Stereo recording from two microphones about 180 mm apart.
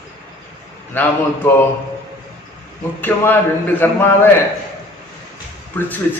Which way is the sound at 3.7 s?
10° left (ahead or behind).